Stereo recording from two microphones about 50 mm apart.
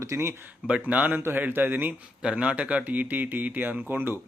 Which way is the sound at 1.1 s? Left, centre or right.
Right.